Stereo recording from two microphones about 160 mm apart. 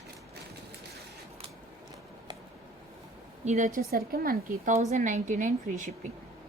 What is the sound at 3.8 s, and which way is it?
A woman's voice, 70° right (ahead or behind).